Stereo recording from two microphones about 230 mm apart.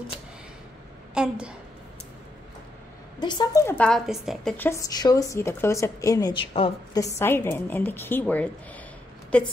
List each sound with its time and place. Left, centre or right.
1.2 s a sound: centre
3.2 s a woman's voice: centre
3.7 s a woman's voice: centre